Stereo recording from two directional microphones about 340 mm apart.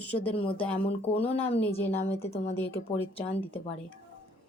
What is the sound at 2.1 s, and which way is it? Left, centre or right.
Speech, centre.